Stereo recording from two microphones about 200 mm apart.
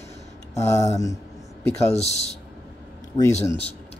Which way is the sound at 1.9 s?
35° left (ahead or behind).